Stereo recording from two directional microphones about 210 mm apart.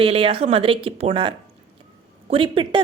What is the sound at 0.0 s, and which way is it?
A woman's voice, 25° right (ahead or behind).